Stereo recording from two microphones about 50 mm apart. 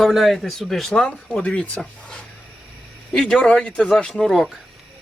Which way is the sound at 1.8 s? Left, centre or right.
Centre.